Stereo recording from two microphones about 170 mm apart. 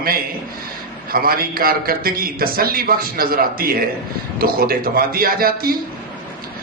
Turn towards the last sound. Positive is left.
turn(degrees=-60)  # may be behind; listen again after turning